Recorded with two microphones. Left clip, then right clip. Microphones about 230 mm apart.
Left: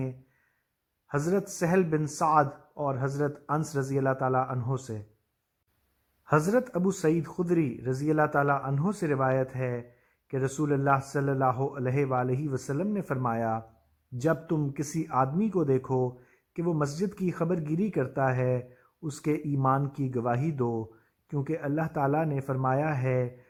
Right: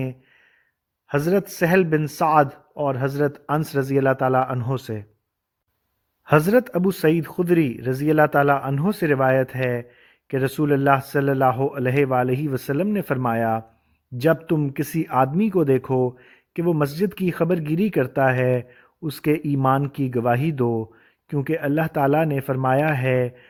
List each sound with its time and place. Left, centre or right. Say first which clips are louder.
1.2 s a man's voice: right 8 dB; right
6.2 s a man's voice: right 8 dB; right